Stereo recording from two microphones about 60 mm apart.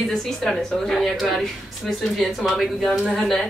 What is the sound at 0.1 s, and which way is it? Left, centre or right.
Speech, centre.